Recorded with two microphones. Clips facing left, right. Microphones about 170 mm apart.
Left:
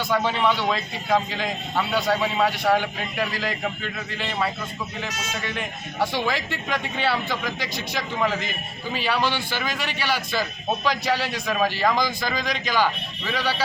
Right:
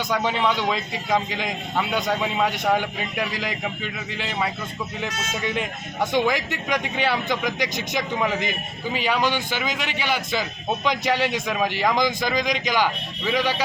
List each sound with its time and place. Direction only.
0.1 s a man's voice: 15° right (ahead or behind)
6.1 s a man's voice: 15° right (ahead or behind)